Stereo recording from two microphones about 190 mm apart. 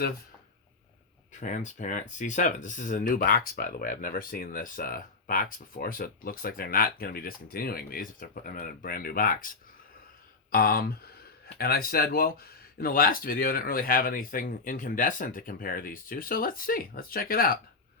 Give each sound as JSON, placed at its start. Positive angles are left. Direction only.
{"t": 1.3, "sound": "speech", "side_deg": 40}
{"t": 10.5, "sound": "speech", "side_deg": 50}